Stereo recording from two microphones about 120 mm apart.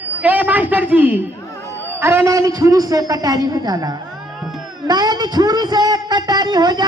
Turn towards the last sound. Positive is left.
turn(degrees=-35)  # may be behind; listen again after turning